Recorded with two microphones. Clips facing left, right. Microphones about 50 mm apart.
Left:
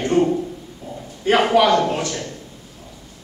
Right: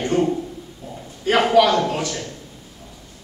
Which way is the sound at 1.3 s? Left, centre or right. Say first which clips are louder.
Even; centre.